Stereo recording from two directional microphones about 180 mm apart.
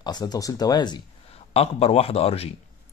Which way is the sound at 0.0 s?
20° left (ahead or behind).